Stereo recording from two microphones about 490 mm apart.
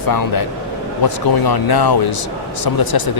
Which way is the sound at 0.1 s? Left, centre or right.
Left.